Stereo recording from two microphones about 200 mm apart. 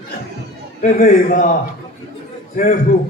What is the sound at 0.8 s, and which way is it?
Speech, 40° left (ahead or behind).